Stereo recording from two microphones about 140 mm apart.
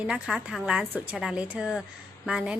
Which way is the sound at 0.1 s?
5° right (ahead or behind).